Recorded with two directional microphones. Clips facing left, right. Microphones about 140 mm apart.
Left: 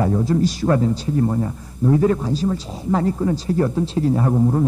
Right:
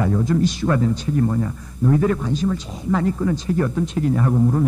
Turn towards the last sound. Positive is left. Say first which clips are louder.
# left 1 dB
turn(degrees=30)  # may be behind; listen again after turning